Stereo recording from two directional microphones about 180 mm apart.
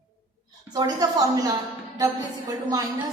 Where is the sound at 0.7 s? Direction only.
20° right (ahead or behind).